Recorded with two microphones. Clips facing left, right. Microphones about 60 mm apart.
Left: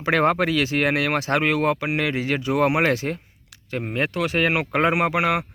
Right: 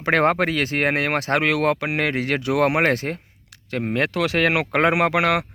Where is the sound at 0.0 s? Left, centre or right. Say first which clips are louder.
Right 1 dB; right.